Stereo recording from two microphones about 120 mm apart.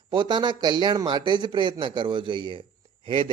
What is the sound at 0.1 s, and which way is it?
A man's voice, 40° right (ahead or behind).